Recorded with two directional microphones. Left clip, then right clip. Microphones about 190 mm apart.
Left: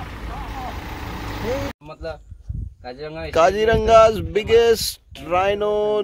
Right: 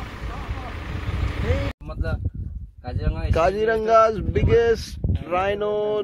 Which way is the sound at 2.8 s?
50° right (ahead or behind).